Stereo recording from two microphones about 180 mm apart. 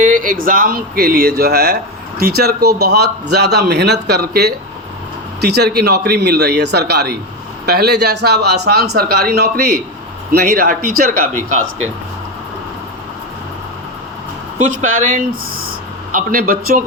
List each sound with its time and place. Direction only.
0.0 s speech: 50° right (ahead or behind)
14.7 s speech: 45° right (ahead or behind)
16.1 s speech: 55° right (ahead or behind)